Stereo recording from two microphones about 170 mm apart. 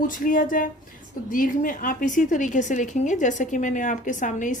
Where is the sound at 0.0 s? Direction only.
50° left (ahead or behind).